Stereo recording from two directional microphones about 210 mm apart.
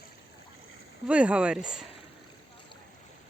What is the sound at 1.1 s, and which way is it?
Speech, 5° right (ahead or behind).